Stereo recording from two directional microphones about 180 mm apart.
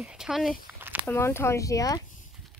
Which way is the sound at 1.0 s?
15° left (ahead or behind).